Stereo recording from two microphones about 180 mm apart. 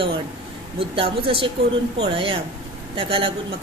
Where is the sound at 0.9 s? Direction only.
30° right (ahead or behind).